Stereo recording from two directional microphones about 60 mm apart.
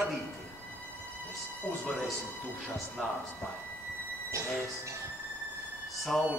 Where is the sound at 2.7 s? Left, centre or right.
Centre.